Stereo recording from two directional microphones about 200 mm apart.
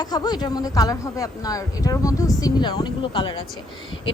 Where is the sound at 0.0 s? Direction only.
20° left (ahead or behind).